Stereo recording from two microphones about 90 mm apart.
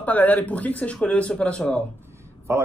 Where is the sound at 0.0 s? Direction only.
20° left (ahead or behind).